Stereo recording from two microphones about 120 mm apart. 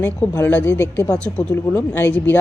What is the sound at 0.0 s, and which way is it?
A woman's voice, 20° left (ahead or behind).